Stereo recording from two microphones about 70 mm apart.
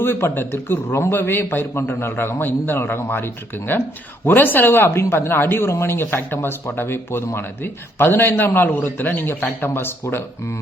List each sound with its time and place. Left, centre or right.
0.0 s a man's voice: left